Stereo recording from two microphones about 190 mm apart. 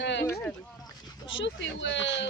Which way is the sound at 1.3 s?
70° left (ahead or behind).